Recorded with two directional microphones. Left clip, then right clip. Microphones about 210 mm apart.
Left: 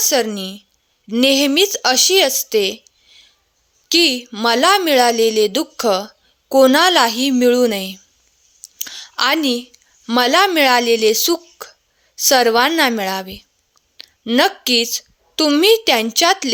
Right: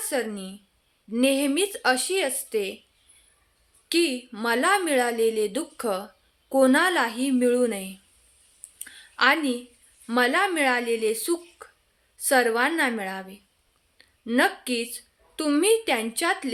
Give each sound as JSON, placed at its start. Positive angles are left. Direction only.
{"t": 0.0, "sound": "a woman's voice", "side_deg": 40}
{"t": 3.8, "sound": "a woman's voice", "side_deg": 45}
{"t": 8.8, "sound": "a sound", "side_deg": 45}
{"t": 10.1, "sound": "a woman's voice", "side_deg": 45}